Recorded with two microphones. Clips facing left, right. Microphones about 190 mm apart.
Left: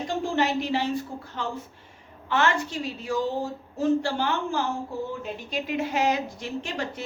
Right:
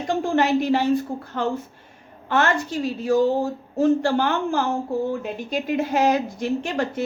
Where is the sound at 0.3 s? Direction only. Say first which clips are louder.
Right 6 dB; 50° right (ahead or behind).